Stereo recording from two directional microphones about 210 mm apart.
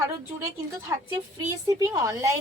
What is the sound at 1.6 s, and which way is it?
Speech, 15° right (ahead or behind).